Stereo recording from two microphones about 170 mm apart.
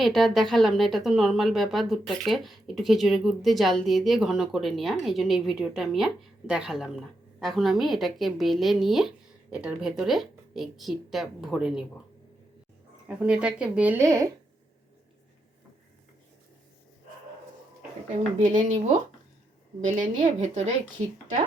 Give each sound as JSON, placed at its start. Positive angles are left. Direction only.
{"t": 0.0, "sound": "speech", "side_deg": 0}
{"t": 13.1, "sound": "speech", "side_deg": -5}
{"t": 18.3, "sound": "a woman's voice", "side_deg": -45}